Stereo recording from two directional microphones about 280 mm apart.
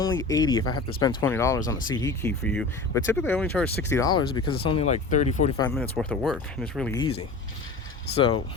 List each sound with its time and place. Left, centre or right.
0.2 s speech: centre
5.6 s speech: centre
6.9 s speech: centre